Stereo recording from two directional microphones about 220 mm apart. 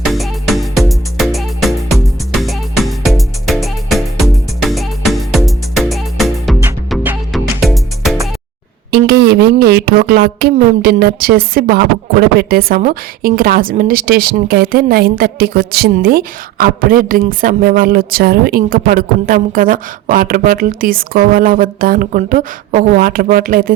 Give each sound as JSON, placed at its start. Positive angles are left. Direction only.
{"t": 0.0, "sound": "music", "side_deg": 0}
{"t": 8.9, "sound": "a woman's voice", "side_deg": -45}